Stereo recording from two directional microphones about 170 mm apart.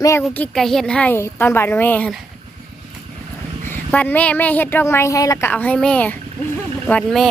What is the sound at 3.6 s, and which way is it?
A woman's voice, 10° left (ahead or behind).